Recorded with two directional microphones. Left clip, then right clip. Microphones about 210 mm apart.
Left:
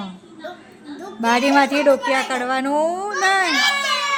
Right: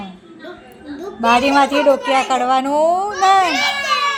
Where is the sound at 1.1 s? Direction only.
10° left (ahead or behind).